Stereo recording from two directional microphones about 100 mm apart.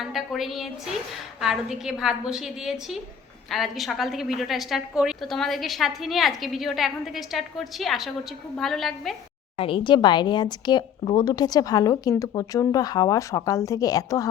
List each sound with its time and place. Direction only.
0.0 s a woman's voice: 5° right (ahead or behind)
9.6 s speech: 65° left (ahead or behind); by 14.3 s 35° left (ahead or behind)